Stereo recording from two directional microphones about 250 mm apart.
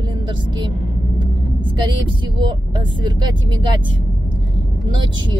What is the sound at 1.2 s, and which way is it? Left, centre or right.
Speech, centre.